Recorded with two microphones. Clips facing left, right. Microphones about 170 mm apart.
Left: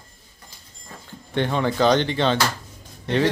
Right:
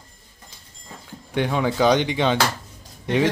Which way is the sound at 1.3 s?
10° right (ahead or behind).